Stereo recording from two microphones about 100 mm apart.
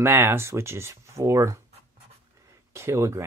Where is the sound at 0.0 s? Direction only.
25° right (ahead or behind).